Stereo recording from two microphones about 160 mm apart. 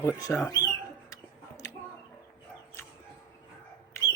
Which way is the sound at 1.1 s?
20° left (ahead or behind).